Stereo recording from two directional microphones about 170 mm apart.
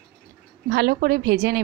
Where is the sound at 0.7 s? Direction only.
65° right (ahead or behind).